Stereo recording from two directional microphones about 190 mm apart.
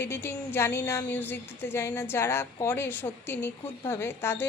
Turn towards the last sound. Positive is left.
turn(degrees=10)  # may be behind; listen again after turning